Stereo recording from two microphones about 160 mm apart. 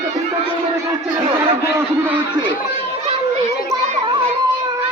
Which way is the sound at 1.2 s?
35° right (ahead or behind).